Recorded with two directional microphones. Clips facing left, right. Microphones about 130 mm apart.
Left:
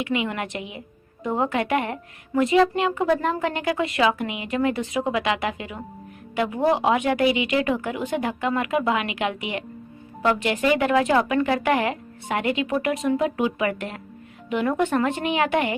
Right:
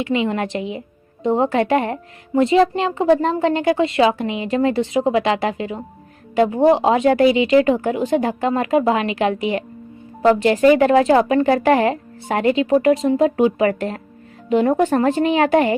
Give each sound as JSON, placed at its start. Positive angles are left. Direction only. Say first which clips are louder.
{"t": 0.0, "sound": "a woman's voice", "louder": "right 6 dB", "side_deg": -30}